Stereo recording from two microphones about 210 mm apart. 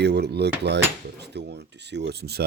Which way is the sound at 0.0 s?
50° right (ahead or behind).